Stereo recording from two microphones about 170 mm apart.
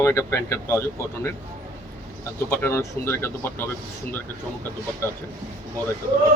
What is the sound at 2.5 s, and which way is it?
Speech, 15° left (ahead or behind).